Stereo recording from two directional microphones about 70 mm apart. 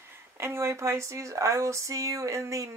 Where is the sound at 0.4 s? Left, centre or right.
Right.